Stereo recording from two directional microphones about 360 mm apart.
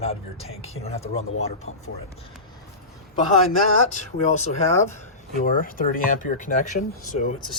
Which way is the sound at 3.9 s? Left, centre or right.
Centre.